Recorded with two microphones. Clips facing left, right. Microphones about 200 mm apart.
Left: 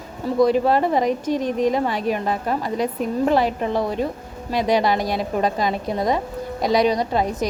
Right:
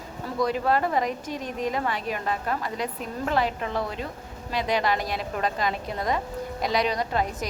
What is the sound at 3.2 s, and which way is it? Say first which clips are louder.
Speech: left 6 dB; 20° left (ahead or behind).